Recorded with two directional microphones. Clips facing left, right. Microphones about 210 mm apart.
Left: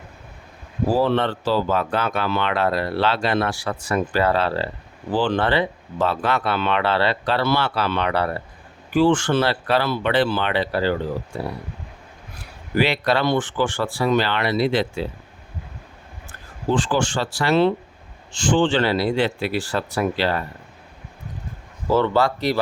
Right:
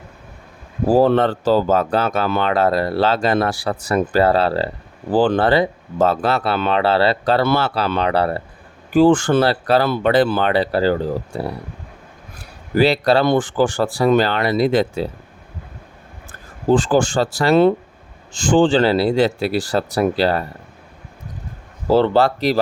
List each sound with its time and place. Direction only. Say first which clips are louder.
0.9 s speech: right 6 dB; 45° right (ahead or behind)
7.7 s speech: right 3 dB; 35° right (ahead or behind)
12.7 s speech: right 5 dB; 35° right (ahead or behind)
16.6 s speech: right 6 dB; 40° right (ahead or behind)
18.5 s speech: right 5 dB; 35° right (ahead or behind)
21.8 s speech: right 4 dB; 30° right (ahead or behind)